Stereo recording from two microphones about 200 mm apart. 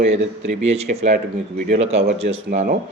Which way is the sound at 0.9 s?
45° right (ahead or behind).